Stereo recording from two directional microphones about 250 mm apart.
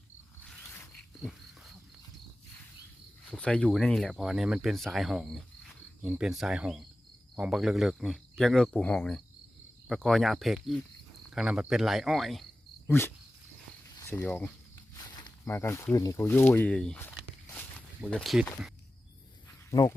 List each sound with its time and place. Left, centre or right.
0.4 s a sound: centre
3.2 s speech: centre
13.8 s cricket: centre
14.9 s speech: centre